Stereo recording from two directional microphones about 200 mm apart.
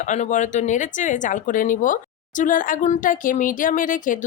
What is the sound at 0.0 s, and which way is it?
Speech, 35° left (ahead or behind).